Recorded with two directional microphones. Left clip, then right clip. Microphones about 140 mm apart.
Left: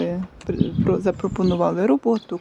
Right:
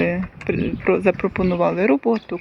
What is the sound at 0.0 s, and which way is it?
Speech, 10° left (ahead or behind).